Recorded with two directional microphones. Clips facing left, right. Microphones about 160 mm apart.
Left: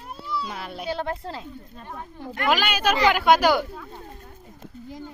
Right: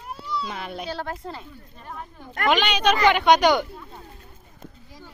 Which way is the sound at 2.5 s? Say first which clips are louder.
Right 2 dB; 5° left (ahead or behind).